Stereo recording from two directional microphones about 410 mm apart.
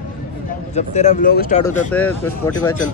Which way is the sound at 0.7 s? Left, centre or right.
Centre.